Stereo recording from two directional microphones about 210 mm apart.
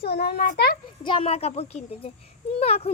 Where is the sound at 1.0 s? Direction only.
25° left (ahead or behind).